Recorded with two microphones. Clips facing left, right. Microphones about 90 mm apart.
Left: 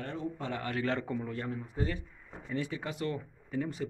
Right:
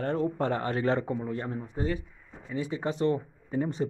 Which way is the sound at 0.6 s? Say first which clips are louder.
Right 6 dB; 30° right (ahead or behind).